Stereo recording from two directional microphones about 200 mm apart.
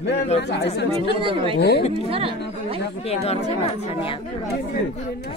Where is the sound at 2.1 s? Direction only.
30° right (ahead or behind).